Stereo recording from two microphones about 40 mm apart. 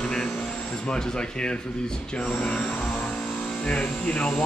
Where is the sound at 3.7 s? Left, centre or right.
Left.